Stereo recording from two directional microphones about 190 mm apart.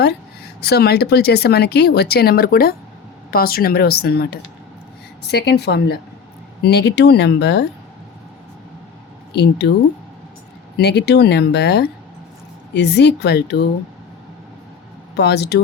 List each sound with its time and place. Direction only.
0.6 s speech: 60° left (ahead or behind)
9.3 s speech: 60° left (ahead or behind)
10.8 s speech: 60° left (ahead or behind)
15.1 s speech: 60° left (ahead or behind)